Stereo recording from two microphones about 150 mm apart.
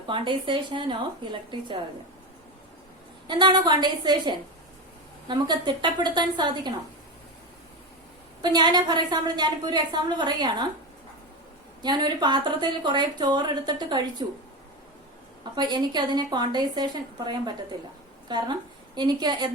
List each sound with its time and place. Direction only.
0.1 s a woman's voice: 30° right (ahead or behind)
3.2 s a woman's voice: 30° right (ahead or behind)
8.4 s a woman's voice: 30° right (ahead or behind)
11.8 s a woman's voice: 30° right (ahead or behind)
15.5 s a woman's voice: 30° right (ahead or behind)